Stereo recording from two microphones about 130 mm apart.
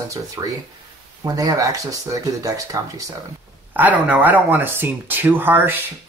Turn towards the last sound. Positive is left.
turn(degrees=-15)  # may be behind; listen again after turning